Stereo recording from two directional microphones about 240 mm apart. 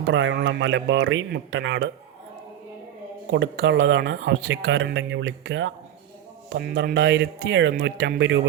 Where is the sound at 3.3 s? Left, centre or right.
Right.